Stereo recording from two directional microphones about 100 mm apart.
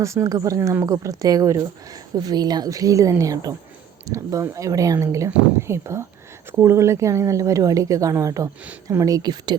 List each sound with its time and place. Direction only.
0.0 s speech: 30° right (ahead or behind)